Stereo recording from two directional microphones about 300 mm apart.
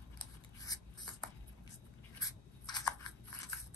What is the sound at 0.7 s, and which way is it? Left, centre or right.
Writing, centre.